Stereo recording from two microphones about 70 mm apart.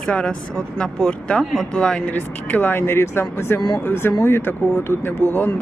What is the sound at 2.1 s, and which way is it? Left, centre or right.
Speech, left.